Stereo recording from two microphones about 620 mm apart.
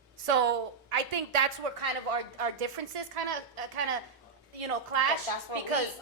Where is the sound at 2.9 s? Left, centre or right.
Right.